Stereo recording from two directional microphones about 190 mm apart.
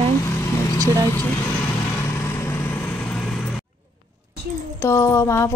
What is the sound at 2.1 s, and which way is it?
Vehicle, 15° left (ahead or behind).